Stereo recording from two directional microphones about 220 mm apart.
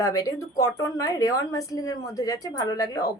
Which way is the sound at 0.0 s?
15° left (ahead or behind).